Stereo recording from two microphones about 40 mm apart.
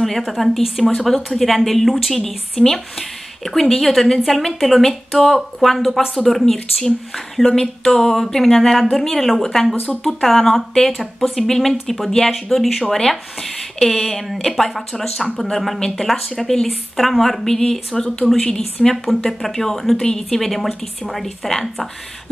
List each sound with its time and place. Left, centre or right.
0.3 s speech: centre
6.4 s speech: centre